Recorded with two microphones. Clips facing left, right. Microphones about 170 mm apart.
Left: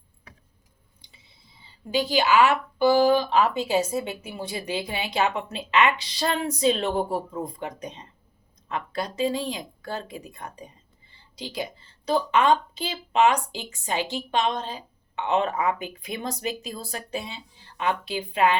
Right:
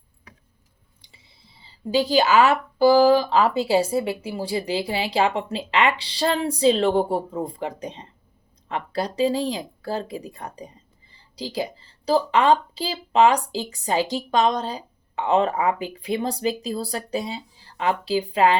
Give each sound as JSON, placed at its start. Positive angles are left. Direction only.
{"t": 2.0, "sound": "speech", "side_deg": -40}